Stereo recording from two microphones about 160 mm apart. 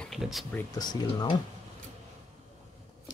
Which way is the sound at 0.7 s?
25° left (ahead or behind).